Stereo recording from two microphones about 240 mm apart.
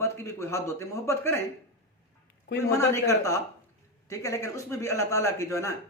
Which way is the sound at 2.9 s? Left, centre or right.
Centre.